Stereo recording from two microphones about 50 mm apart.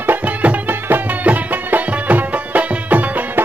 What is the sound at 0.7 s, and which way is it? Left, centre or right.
Music, right.